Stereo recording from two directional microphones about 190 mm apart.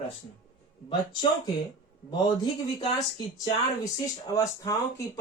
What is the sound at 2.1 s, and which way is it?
Speech, 20° left (ahead or behind).